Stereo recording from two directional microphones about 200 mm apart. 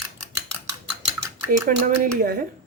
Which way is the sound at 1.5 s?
40° right (ahead or behind).